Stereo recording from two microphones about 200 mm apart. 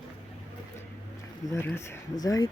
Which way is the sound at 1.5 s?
15° left (ahead or behind).